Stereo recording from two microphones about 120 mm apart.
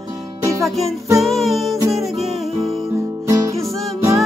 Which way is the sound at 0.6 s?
Centre (ahead or behind).